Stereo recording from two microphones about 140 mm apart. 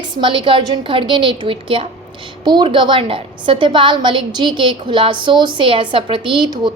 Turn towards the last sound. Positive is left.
turn(degrees=-35)  # may be behind; listen again after turning